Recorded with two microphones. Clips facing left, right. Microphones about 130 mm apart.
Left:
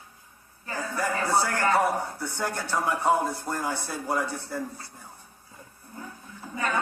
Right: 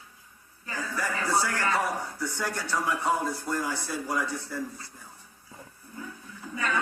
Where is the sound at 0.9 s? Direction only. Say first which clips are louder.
Left 3 dB; 50° left (ahead or behind).